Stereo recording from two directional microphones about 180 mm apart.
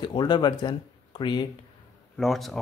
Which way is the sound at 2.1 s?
Centre (ahead or behind).